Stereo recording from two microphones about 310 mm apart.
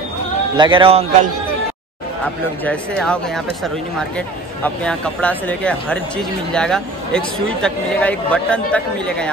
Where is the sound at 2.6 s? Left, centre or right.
Centre.